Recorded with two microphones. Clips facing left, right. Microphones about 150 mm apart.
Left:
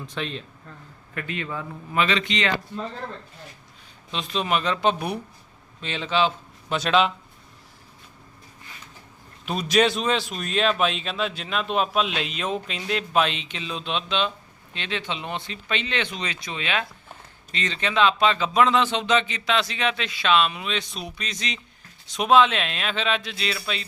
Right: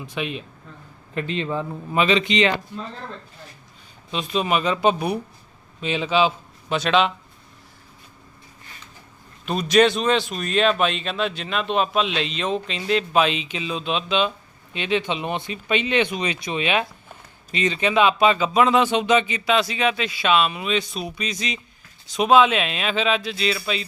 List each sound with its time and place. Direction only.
0.0 s speech: 10° right (ahead or behind)
1.1 s a man's voice: 25° right (ahead or behind)
4.1 s a man's voice: 5° right (ahead or behind)
9.5 s speech: centre (ahead or behind)